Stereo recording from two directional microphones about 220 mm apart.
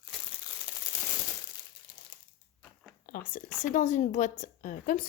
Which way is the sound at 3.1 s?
40° left (ahead or behind).